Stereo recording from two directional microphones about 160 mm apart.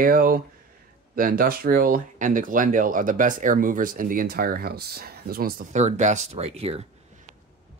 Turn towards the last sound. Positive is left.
turn(degrees=-40)  # may be behind; listen again after turning